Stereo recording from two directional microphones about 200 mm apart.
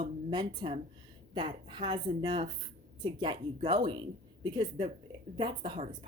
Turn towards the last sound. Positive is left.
turn(degrees=-25)  # may be behind; listen again after turning